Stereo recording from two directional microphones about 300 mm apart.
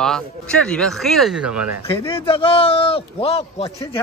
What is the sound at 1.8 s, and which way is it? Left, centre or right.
A man's voice, centre.